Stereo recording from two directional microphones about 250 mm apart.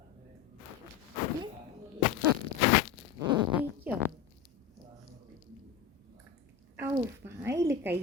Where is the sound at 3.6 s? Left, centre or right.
Centre.